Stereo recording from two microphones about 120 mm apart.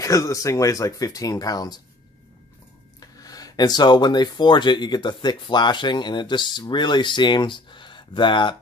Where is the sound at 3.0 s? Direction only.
30° left (ahead or behind).